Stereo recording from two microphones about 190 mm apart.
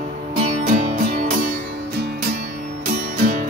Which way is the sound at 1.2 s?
50° right (ahead or behind).